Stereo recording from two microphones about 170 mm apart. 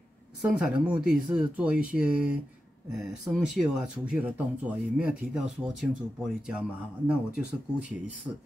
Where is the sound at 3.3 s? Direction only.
5° right (ahead or behind).